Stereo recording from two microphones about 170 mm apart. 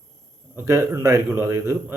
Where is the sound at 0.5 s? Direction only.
15° right (ahead or behind).